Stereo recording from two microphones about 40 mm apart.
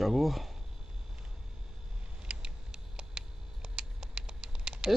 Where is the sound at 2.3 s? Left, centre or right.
Centre.